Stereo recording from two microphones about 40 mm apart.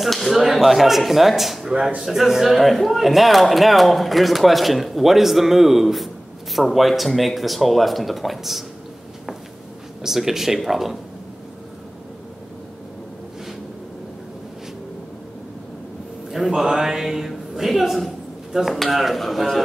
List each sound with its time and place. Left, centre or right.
0.0 s a sound: centre
0.4 s speech: centre
10.0 s speech: centre
16.3 s speech: centre